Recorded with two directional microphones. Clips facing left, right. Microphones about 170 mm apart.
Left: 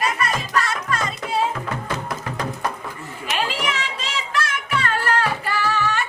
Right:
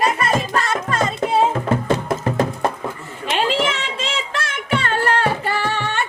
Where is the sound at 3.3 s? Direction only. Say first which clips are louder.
Right 5 dB; 25° right (ahead or behind).